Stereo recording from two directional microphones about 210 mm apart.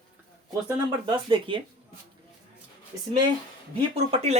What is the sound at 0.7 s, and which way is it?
Speech, 20° right (ahead or behind).